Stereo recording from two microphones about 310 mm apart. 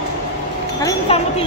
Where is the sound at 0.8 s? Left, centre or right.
Centre.